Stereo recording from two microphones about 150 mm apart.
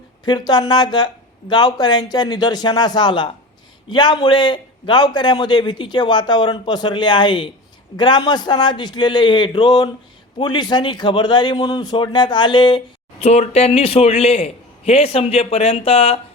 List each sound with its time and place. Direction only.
0.3 s a man's voice: 30° left (ahead or behind)
13.1 s a man's voice: 45° left (ahead or behind)